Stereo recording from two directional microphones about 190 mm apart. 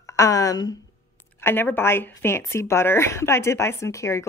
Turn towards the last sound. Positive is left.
turn(degrees=15)  # may be behind; listen again after turning